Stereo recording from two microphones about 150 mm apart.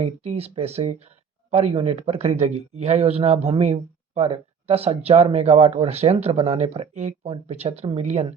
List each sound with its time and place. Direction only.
0.0 s a man's voice: 45° right (ahead or behind)